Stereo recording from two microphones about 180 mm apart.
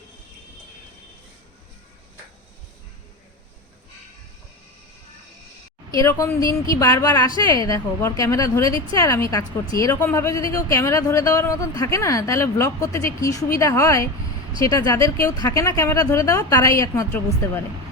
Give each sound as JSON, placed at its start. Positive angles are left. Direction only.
{"t": 5.9, "sound": "a woman's voice", "side_deg": 20}